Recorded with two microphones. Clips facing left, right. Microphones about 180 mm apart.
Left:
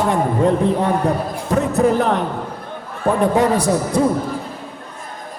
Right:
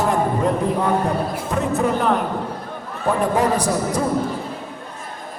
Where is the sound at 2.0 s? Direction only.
35° left (ahead or behind).